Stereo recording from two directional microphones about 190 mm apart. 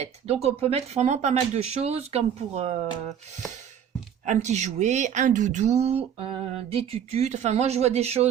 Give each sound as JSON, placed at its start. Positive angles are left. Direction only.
{"t": 0.0, "sound": "speech", "side_deg": -35}
{"t": 4.3, "sound": "speech", "side_deg": -35}